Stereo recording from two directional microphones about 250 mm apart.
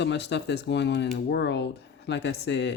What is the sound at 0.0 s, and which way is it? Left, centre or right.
Speech, left.